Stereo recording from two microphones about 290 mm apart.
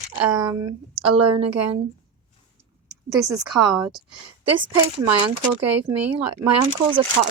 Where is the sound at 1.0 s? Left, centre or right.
Right.